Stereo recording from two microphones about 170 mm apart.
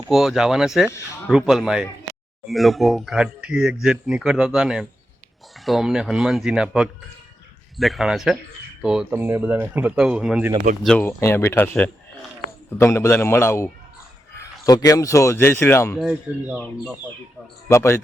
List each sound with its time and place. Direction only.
0.1 s speech: centre (ahead or behind)
10.8 s speech: 10° left (ahead or behind)
16.0 s speech: 5° right (ahead or behind)
16.6 s speech: 10° left (ahead or behind)